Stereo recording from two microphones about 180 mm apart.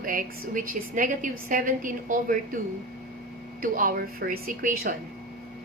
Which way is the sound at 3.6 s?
50° right (ahead or behind).